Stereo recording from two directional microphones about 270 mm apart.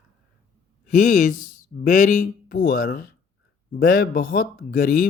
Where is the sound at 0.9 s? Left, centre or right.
Left.